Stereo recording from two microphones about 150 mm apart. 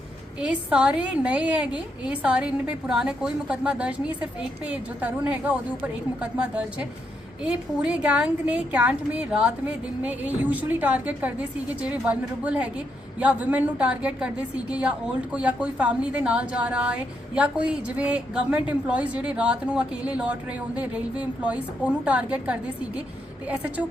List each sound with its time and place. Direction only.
0.3 s a woman's voice: 5° right (ahead or behind)